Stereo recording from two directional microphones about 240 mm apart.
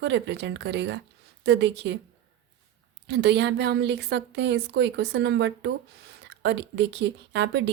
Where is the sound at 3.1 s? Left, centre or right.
Right.